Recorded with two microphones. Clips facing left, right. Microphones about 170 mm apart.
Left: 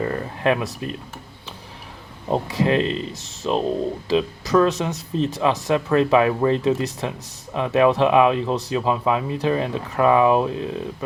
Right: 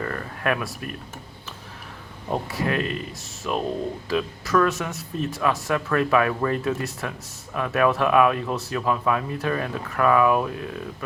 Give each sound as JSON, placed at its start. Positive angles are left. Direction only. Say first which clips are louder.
{"t": 0.0, "sound": "speech", "louder": "left 5 dB", "side_deg": 20}
{"t": 2.2, "sound": "speech", "louder": "left 5 dB", "side_deg": 20}